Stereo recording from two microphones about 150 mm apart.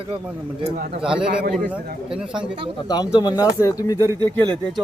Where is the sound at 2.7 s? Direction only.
25° left (ahead or behind).